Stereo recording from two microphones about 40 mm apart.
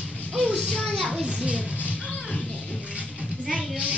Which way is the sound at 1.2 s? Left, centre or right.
Right.